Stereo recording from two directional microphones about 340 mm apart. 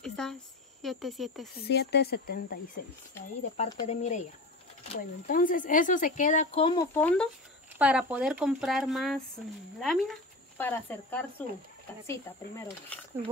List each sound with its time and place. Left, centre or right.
0.0 s a sound: centre
0.8 s speech: centre
1.6 s speech: left
3.5 s speech: centre
5.2 s speech: left; by 13.0 s centre